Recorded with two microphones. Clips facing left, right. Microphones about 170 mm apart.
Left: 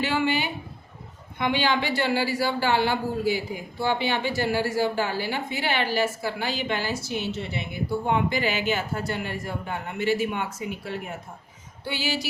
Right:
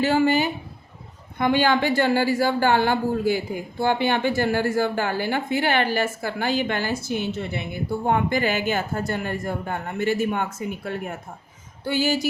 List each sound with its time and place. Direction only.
0.0 s a woman's voice: 45° right (ahead or behind)